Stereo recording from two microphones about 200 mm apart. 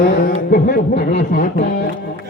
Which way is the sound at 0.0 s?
45° left (ahead or behind).